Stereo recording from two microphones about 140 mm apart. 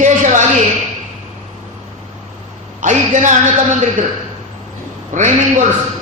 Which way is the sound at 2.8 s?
60° right (ahead or behind).